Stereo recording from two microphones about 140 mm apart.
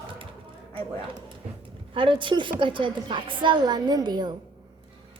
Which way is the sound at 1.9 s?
35° right (ahead or behind).